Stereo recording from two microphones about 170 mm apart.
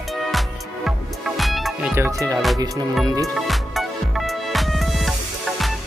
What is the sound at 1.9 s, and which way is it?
Speech, 15° right (ahead or behind).